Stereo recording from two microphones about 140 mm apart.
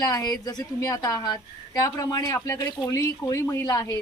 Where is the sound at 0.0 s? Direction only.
25° left (ahead or behind).